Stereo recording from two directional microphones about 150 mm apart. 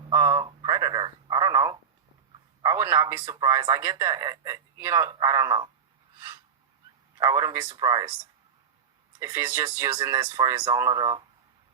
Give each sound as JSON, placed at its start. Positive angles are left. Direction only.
{"t": 0.1, "sound": "telephone", "side_deg": -20}
{"t": 2.7, "sound": "speech", "side_deg": -20}
{"t": 6.1, "sound": "a sound", "side_deg": -20}
{"t": 7.2, "sound": "speech", "side_deg": -25}
{"t": 9.1, "sound": "speech", "side_deg": -20}